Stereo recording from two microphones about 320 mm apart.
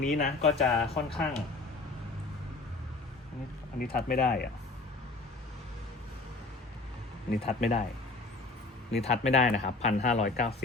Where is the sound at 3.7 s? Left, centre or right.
Left.